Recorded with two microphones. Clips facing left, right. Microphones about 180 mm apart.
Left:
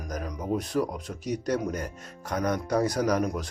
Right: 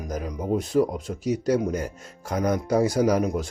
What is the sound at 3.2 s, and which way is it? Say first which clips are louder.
Speech: right 4 dB; 25° right (ahead or behind).